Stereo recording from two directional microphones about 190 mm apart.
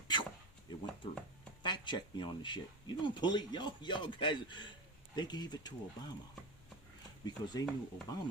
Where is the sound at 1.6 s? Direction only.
25° left (ahead or behind).